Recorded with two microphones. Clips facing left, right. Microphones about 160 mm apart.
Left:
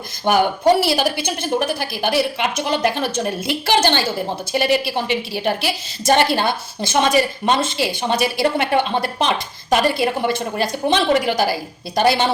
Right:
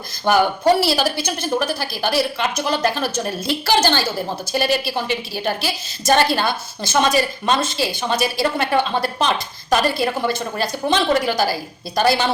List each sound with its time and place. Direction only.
0.3 s a woman's voice: 15° left (ahead or behind)